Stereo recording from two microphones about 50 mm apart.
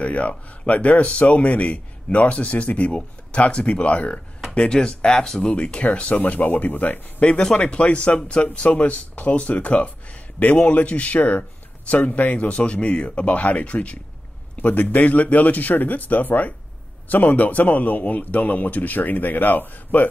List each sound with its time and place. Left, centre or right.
0.0 s a man's voice: left